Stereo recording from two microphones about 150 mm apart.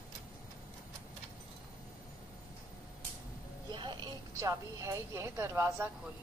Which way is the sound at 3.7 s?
30° right (ahead or behind).